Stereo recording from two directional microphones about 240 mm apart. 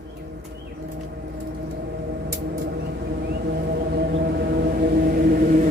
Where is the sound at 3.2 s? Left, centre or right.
Right.